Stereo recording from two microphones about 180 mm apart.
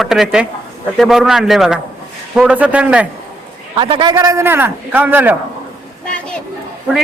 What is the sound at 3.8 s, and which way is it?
Speech, 30° right (ahead or behind).